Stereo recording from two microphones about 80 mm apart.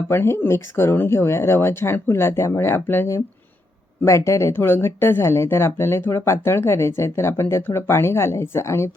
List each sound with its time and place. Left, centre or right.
0.1 s speech: left
4.0 s speech: left